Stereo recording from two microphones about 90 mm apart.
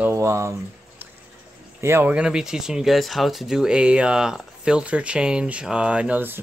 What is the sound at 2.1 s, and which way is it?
Speech, 10° right (ahead or behind).